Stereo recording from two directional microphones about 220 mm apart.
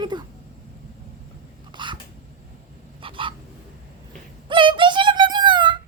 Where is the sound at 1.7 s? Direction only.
20° right (ahead or behind).